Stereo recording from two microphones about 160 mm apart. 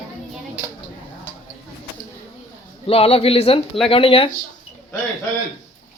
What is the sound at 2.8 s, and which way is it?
Speech, 35° left (ahead or behind).